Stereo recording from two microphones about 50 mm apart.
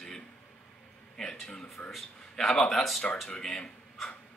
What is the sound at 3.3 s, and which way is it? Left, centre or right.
Speech, centre.